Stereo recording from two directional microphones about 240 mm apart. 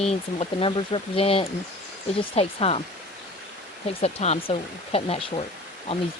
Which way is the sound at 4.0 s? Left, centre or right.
Left.